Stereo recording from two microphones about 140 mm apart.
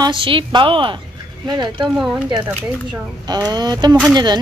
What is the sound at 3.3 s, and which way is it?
A woman's voice, 30° right (ahead or behind).